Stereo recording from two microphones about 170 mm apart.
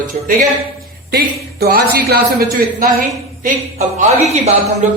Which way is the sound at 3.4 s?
45° right (ahead or behind).